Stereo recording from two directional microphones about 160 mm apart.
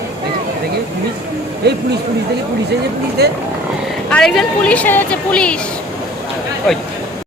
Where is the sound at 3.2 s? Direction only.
90° right.